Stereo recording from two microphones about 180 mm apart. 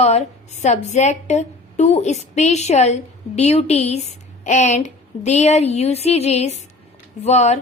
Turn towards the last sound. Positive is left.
turn(degrees=40)  # may be behind; listen again after turning